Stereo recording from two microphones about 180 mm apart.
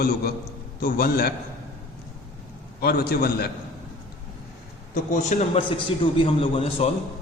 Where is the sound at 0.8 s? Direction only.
60° left (ahead or behind).